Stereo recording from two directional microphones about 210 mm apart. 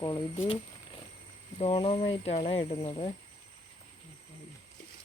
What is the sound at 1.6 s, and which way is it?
Speech, 25° left (ahead or behind).